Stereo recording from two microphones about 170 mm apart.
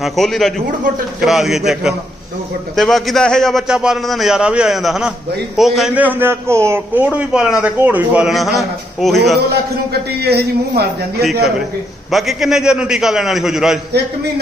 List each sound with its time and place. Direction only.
0.0 s a man's voice: centre (ahead or behind)
9.5 s a man's voice: 70° right (ahead or behind)
12.1 s a man's voice: centre (ahead or behind)